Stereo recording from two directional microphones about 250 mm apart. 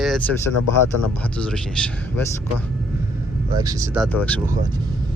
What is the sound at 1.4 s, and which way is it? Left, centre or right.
Speech, centre.